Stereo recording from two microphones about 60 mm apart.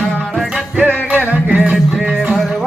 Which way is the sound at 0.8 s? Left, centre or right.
Right.